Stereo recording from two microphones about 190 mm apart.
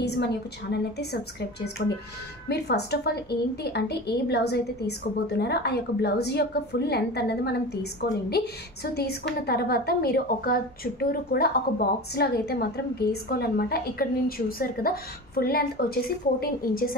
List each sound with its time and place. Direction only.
0.0 s a woman's voice: 60° left (ahead or behind)
9.5 s a woman's voice: 55° left (ahead or behind)